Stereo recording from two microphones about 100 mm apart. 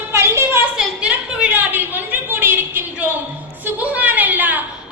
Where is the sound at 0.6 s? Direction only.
10° right (ahead or behind).